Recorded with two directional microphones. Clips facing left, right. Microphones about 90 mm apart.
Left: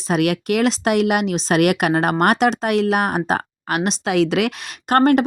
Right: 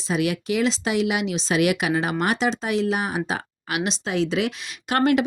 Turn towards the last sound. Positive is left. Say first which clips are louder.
# left 5 dB
turn(degrees=45)  # may be behind; listen again after turning